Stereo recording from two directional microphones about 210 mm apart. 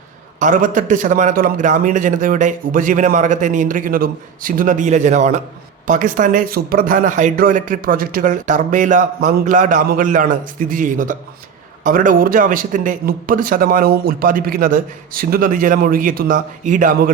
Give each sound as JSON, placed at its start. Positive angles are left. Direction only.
{"t": 0.3, "sound": "a man's voice", "side_deg": -40}